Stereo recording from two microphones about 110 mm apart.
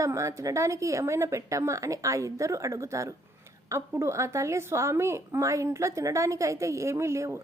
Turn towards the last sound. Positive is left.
turn(degrees=-25)  # may be behind; listen again after turning